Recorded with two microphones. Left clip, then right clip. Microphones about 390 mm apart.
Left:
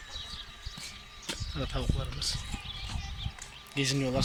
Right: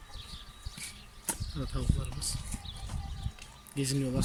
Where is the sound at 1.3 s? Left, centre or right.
Right.